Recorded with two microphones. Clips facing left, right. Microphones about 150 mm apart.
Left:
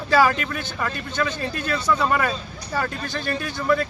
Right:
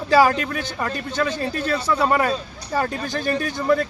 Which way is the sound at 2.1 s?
35° right (ahead or behind).